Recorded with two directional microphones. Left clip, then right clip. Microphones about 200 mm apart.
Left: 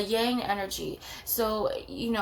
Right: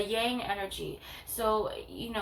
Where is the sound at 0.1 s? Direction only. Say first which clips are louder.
Left 3 dB; 45° left (ahead or behind).